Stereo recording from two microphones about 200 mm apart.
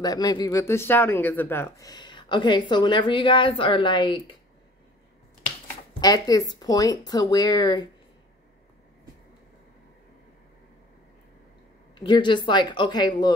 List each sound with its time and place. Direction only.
0.0 s speech: 20° left (ahead or behind)
5.9 s speech: 20° left (ahead or behind)
11.9 s speech: 25° left (ahead or behind)